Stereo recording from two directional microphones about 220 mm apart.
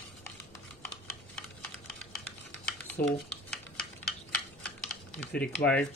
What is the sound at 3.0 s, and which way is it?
Speech, 40° left (ahead or behind).